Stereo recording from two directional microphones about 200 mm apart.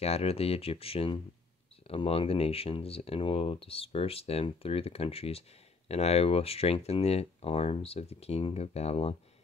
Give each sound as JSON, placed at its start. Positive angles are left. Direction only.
{"t": 0.0, "sound": "speech", "side_deg": 30}